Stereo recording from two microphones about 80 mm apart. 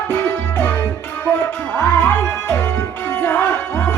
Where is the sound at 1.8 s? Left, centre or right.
Left.